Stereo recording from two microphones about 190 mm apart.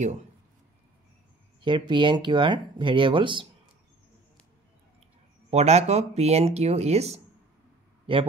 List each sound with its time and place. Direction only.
1.6 s speech: 25° right (ahead or behind)
5.5 s a man's voice: 35° right (ahead or behind)